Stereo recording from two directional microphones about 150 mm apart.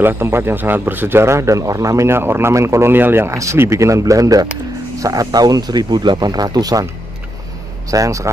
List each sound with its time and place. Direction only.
0.0 s speech: 15° right (ahead or behind)
7.9 s speech: 20° right (ahead or behind)